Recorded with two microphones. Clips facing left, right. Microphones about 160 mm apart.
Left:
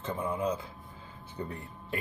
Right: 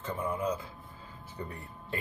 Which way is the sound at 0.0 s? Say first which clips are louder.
Left 1 dB; 20° left (ahead or behind).